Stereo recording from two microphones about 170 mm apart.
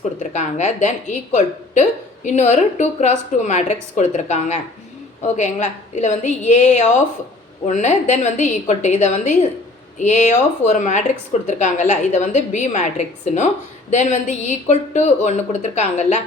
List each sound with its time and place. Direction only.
0.2 s a woman's voice: 45° left (ahead or behind)
13.9 s a woman's voice: 45° left (ahead or behind)